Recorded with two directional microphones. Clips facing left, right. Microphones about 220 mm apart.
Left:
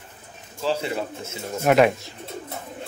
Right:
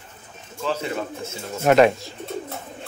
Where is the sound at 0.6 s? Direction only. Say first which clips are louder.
Left 1 dB; 30° left (ahead or behind).